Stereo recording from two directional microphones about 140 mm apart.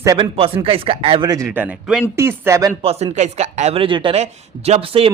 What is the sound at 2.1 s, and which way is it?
Speech, 20° right (ahead or behind).